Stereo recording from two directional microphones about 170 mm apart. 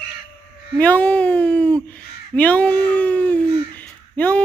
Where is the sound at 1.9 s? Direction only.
10° left (ahead or behind).